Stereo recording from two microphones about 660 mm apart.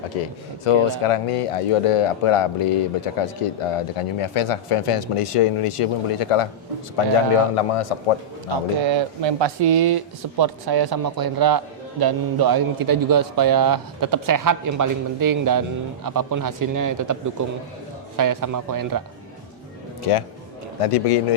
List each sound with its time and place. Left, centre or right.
0.6 s speech: left
8.4 s a man's voice: right
18.2 s a man's voice: right
20.8 s speech: left